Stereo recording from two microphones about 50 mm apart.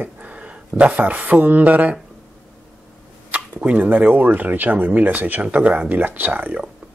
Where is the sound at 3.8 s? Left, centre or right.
Right.